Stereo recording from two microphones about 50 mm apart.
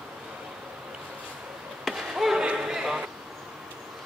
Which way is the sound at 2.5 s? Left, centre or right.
Centre.